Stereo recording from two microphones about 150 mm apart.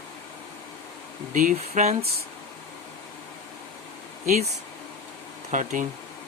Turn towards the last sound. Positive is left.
turn(degrees=-60)  # may be behind; listen again after turning